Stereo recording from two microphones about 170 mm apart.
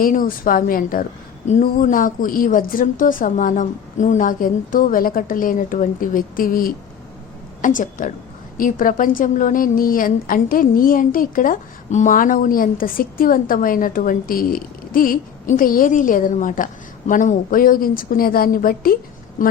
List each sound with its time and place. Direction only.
0.0 s a woman's voice: 55° left (ahead or behind)